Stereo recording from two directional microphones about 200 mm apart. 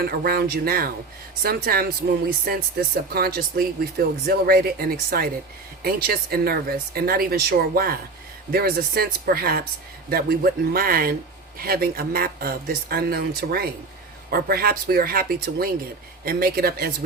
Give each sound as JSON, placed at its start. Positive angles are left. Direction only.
{"t": 0.0, "sound": "speech", "side_deg": -50}
{"t": 3.1, "sound": "speech", "side_deg": -50}